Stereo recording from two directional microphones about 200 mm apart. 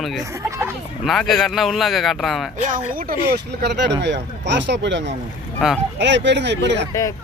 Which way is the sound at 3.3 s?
55° right (ahead or behind).